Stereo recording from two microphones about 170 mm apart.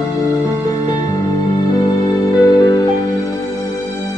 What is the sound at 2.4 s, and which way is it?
Music, 25° left (ahead or behind).